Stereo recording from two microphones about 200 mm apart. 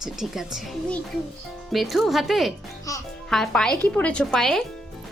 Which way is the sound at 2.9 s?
15° left (ahead or behind).